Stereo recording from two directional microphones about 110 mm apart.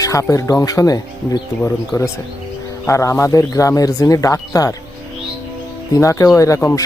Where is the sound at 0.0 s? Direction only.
30° left (ahead or behind).